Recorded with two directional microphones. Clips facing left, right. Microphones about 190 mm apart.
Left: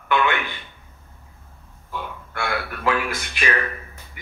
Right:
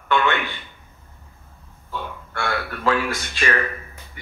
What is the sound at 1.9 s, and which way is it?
Speech, 15° left (ahead or behind).